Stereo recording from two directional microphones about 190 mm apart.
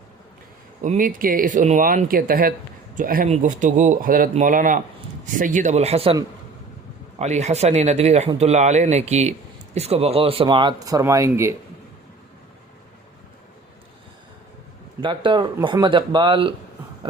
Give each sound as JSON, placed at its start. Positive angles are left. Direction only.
{"t": 0.8, "sound": "speech", "side_deg": -45}
{"t": 7.2, "sound": "speech", "side_deg": -35}
{"t": 15.0, "sound": "speech", "side_deg": -25}